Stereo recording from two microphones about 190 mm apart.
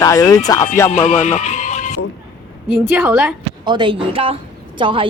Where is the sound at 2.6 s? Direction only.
5° right (ahead or behind).